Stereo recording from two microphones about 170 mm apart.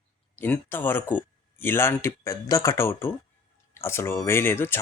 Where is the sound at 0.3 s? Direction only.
10° left (ahead or behind).